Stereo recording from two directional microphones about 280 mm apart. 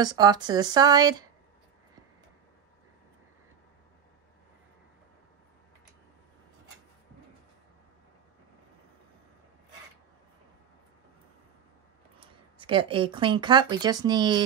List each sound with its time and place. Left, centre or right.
0.0 s speech: centre
12.2 s speech: centre